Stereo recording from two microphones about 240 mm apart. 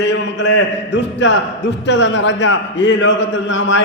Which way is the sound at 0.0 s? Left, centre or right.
Left.